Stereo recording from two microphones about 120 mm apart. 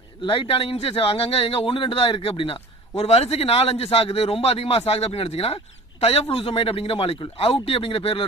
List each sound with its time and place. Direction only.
0.2 s speech: 50° left (ahead or behind)